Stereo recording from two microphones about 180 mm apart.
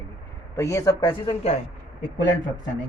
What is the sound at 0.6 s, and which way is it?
A man's voice, 15° left (ahead or behind).